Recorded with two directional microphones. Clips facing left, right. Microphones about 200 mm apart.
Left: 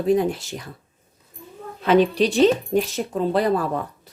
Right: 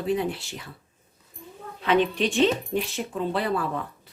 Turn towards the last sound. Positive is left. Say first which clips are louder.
# left 6 dB
turn(degrees=40)  # may be behind; listen again after turning